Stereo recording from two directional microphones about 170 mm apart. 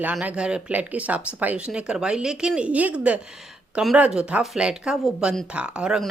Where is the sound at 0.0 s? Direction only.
10° right (ahead or behind).